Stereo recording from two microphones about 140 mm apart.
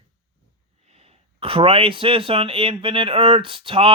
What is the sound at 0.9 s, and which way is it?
Speech, 45° right (ahead or behind).